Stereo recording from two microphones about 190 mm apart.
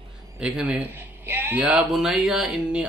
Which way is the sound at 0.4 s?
5° right (ahead or behind).